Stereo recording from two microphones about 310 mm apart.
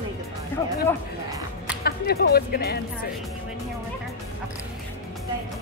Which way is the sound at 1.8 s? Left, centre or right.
Left.